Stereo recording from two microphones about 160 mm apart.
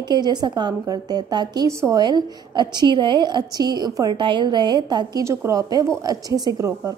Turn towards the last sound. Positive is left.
turn(degrees=-20)  # may be behind; listen again after turning